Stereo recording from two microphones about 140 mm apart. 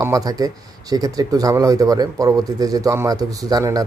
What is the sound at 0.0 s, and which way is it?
Speech, 25° right (ahead or behind).